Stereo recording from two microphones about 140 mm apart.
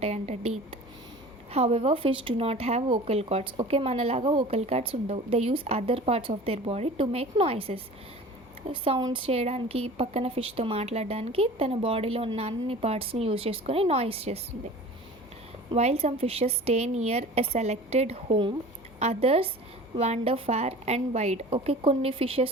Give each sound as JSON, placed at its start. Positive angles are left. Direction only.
{"t": 0.0, "sound": "a woman's voice", "side_deg": -50}
{"t": 15.7, "sound": "speech", "side_deg": -50}